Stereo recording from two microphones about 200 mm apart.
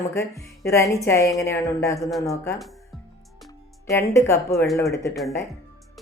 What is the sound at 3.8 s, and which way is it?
Speech, 15° left (ahead or behind).